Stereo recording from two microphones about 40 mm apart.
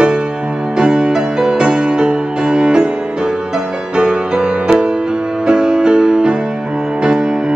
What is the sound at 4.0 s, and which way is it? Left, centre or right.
Music, right.